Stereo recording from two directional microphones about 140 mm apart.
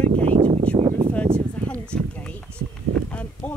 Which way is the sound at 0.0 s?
45° right (ahead or behind).